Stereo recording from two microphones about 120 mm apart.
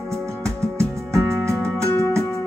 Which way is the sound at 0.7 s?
25° right (ahead or behind).